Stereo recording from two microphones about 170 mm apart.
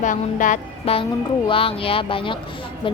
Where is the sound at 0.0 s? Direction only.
50° left (ahead or behind).